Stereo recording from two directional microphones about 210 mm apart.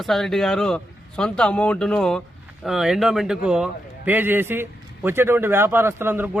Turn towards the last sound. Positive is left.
turn(degrees=-10)  # may be behind; listen again after turning